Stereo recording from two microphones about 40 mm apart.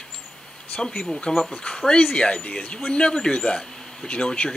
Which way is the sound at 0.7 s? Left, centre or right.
Centre.